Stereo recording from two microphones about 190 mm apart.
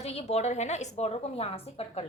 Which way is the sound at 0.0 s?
35° left (ahead or behind).